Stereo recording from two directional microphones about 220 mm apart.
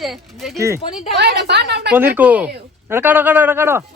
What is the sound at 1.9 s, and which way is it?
Speech, 10° right (ahead or behind).